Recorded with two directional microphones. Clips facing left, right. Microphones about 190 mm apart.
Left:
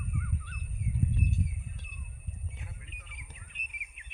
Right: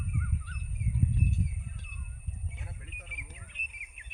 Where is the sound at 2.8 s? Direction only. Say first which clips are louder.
Right 3 dB; 55° right (ahead or behind).